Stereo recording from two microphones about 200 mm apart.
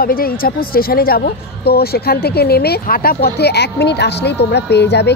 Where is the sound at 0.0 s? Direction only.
45° left (ahead or behind).